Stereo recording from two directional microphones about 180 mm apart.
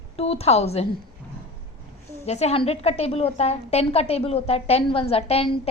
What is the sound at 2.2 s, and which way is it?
A woman's voice, 35° left (ahead or behind).